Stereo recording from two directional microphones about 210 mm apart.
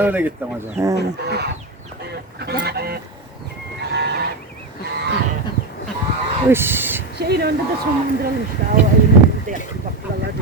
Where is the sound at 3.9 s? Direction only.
55° right (ahead or behind).